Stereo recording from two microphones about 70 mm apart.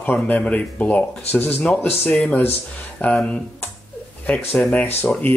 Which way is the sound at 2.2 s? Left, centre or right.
Centre.